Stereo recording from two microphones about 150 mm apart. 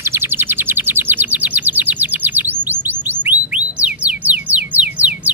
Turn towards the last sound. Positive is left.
turn(degrees=-10)  # may be behind; listen again after turning